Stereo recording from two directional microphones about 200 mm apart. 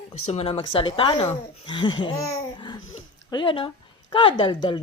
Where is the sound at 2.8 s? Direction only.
80° left.